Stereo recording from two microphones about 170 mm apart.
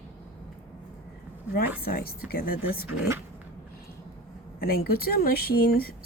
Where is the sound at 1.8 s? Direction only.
60° left (ahead or behind).